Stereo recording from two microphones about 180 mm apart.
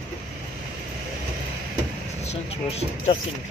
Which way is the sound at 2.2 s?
35° left (ahead or behind).